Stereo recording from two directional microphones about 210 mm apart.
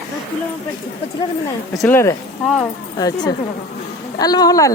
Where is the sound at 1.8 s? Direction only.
15° left (ahead or behind).